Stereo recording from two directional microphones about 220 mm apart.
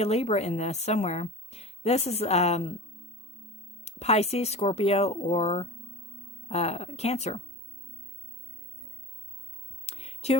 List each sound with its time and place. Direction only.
0.0 s a woman's voice: 30° left (ahead or behind)
3.8 s a woman's voice: 30° left (ahead or behind)
9.8 s music: 30° left (ahead or behind)